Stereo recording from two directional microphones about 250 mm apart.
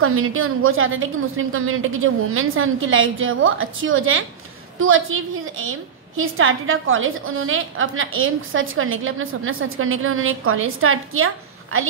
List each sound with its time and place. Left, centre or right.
0.0 s a woman's voice: right